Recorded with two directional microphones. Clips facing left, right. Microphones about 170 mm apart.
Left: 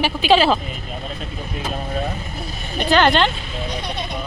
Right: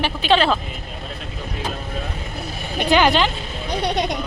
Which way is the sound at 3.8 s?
85° right.